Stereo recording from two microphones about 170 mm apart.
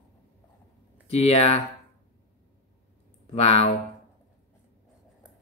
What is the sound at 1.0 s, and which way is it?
Speech, 35° left (ahead or behind).